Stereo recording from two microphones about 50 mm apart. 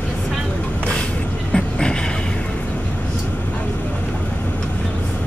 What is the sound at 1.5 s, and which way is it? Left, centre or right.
Music, centre.